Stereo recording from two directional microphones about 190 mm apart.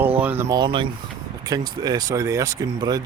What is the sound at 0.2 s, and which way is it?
Speech, 10° right (ahead or behind).